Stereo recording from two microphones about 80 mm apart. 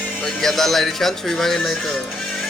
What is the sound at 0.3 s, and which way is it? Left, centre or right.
Speech, centre.